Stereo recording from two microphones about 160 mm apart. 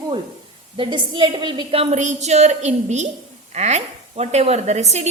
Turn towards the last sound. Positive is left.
turn(degrees=-45)  # may be behind; listen again after turning